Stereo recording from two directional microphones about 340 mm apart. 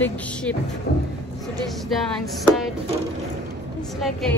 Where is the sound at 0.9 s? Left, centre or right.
Left.